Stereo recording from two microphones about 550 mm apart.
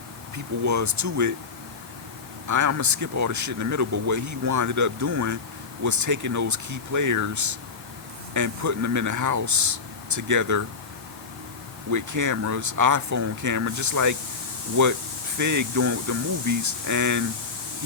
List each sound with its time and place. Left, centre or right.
0.6 s speech: right
2.5 s speech: right
11.9 s speech: right